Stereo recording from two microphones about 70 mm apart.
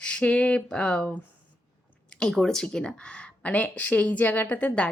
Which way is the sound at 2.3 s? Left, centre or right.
Centre.